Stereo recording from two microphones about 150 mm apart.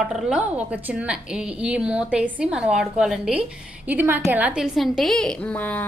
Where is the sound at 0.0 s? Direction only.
Centre (ahead or behind).